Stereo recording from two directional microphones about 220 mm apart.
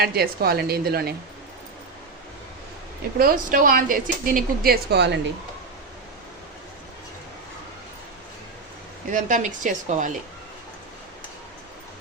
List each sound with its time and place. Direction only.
0.0 s a woman's voice: 45° right (ahead or behind)
3.2 s a woman's voice: 40° right (ahead or behind)
9.0 s a woman's voice: 35° right (ahead or behind)